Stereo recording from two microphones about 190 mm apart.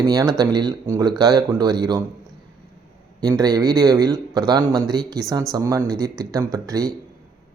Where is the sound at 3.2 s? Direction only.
20° right (ahead or behind).